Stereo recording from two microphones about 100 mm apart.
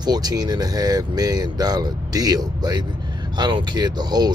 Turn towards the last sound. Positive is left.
turn(degrees=-45)  # may be behind; listen again after turning